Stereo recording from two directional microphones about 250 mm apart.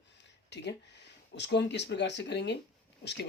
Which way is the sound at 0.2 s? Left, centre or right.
Left.